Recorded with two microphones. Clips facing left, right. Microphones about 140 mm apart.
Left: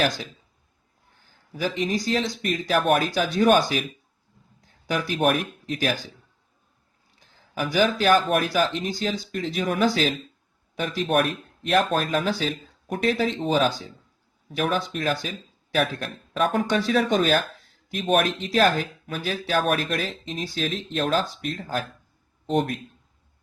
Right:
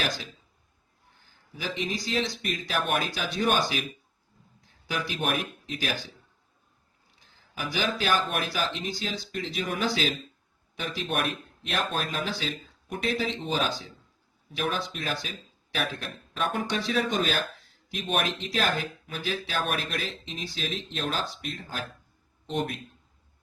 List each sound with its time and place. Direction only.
1.5 s speech: 45° left (ahead or behind)
4.9 s speech: 45° left (ahead or behind)
7.5 s a man's voice: 50° left (ahead or behind)